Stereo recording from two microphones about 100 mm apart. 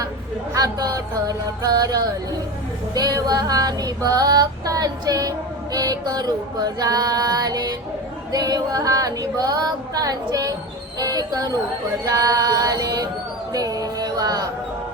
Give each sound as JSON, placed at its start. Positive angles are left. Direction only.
{"t": 0.5, "sound": "female singing", "side_deg": -40}
{"t": 11.0, "sound": "speech", "side_deg": -40}
{"t": 12.0, "sound": "female singing", "side_deg": -35}
{"t": 13.5, "sound": "music", "side_deg": -35}